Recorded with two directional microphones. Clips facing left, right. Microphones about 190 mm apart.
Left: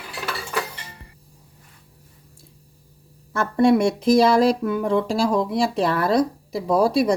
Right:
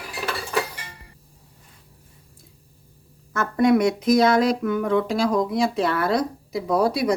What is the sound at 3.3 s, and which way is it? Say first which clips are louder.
Speech: left 1 dB; 30° left (ahead or behind).